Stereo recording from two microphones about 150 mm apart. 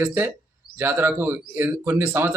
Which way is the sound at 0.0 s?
15° right (ahead or behind).